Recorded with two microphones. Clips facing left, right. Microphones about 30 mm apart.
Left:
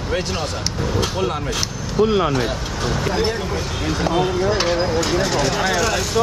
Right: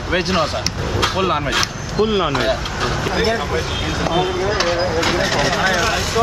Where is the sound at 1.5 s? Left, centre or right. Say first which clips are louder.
Right 3 dB; right.